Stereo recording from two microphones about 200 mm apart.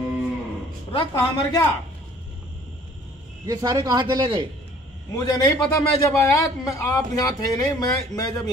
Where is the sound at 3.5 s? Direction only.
20° right (ahead or behind).